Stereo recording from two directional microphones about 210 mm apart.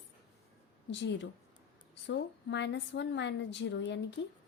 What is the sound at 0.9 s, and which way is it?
A woman's voice, 60° left (ahead or behind).